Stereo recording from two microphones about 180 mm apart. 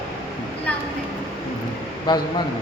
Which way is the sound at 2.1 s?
25° left (ahead or behind).